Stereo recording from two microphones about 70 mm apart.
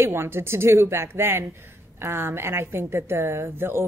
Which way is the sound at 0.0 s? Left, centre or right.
Right.